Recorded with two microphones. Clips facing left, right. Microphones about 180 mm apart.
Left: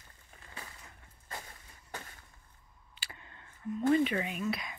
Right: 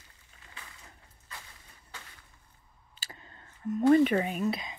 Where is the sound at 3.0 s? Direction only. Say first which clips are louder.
Right 1 dB; 40° right (ahead or behind).